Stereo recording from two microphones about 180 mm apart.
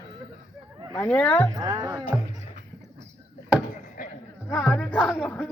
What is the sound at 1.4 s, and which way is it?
Speech, 25° right (ahead or behind).